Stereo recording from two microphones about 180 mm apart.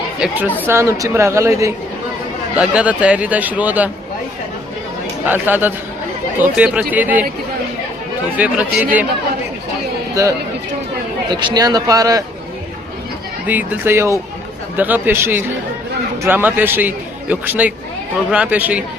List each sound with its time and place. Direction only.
0.4 s a woman's voice: 10° left (ahead or behind)
0.7 s a man's voice: 15° right (ahead or behind)
5.2 s a man's voice: 10° right (ahead or behind)
8.4 s a man's voice: 10° right (ahead or behind)
11.3 s speech: 25° right (ahead or behind)
13.5 s a man's voice: 10° right (ahead or behind)